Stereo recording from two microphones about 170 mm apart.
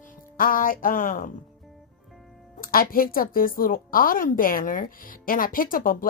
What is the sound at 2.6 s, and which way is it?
Speech, 60° left (ahead or behind).